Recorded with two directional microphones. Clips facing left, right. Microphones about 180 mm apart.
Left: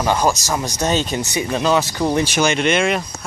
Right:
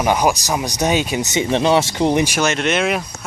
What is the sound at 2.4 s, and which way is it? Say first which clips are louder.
Speech: left 1 dB; centre (ahead or behind).